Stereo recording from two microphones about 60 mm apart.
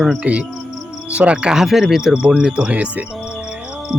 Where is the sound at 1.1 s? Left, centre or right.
Centre.